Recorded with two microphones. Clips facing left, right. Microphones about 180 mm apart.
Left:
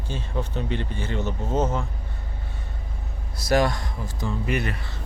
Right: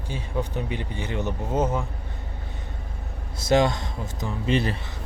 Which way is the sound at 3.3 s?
25° right (ahead or behind).